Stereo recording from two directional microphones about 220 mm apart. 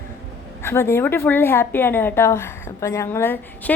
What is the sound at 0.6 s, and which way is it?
A woman's voice, 10° left (ahead or behind).